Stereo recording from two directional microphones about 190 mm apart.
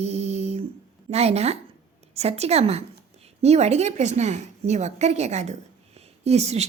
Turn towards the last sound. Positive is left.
turn(degrees=-35)  # may be behind; listen again after turning